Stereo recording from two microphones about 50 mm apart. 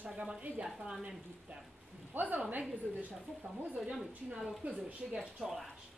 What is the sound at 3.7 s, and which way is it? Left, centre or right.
Speech, centre.